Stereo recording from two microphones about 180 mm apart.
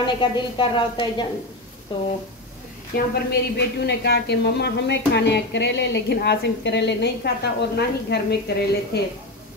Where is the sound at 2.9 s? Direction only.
55° left (ahead or behind).